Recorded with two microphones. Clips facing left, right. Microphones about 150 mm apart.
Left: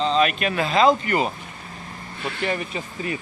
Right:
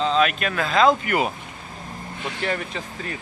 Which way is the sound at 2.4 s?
5° left (ahead or behind).